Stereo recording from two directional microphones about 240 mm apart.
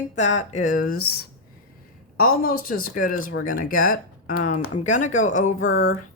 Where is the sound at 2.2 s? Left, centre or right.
Left.